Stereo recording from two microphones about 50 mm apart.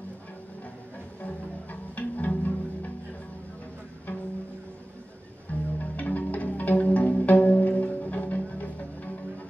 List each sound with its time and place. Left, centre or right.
1.2 s music: left
5.5 s music: left